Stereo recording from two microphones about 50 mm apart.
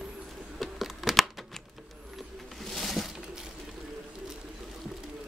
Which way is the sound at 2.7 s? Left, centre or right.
Centre.